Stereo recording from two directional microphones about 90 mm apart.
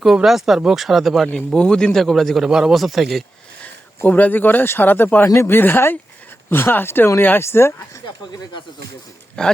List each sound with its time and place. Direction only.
0.0 s a man's voice: 5° right (ahead or behind)
3.6 s speech: 20° left (ahead or behind)
9.4 s speech: 10° left (ahead or behind)